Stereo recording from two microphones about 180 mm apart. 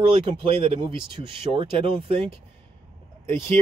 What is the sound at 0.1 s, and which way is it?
Speech, 30° right (ahead or behind).